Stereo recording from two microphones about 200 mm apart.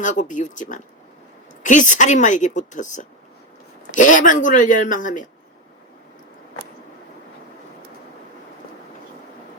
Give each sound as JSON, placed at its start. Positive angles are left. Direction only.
{"t": 0.0, "sound": "a woman's voice", "side_deg": 40}